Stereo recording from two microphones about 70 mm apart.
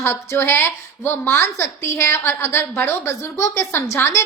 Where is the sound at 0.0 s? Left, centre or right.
Left.